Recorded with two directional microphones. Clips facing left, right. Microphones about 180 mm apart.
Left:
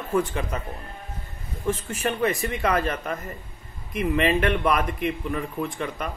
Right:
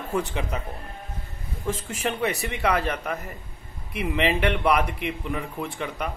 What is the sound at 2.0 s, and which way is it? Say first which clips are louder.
A man's voice: left 1 dB; 10° right (ahead or behind).